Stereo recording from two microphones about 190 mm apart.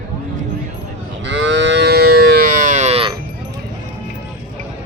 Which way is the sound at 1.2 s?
70° right (ahead or behind).